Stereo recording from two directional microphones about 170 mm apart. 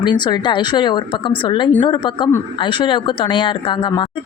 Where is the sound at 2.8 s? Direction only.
30° left (ahead or behind).